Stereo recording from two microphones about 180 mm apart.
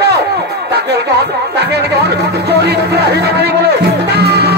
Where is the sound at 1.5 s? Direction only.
65° right (ahead or behind).